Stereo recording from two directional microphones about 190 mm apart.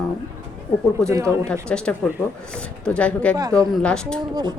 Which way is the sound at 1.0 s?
15° right (ahead or behind).